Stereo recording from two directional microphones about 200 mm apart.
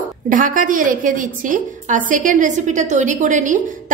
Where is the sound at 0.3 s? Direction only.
40° right (ahead or behind).